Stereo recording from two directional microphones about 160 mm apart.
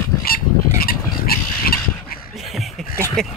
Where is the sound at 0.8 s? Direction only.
70° left (ahead or behind).